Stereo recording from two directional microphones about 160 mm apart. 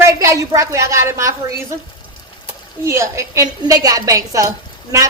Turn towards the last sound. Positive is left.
turn(degrees=-20)  # may be behind; listen again after turning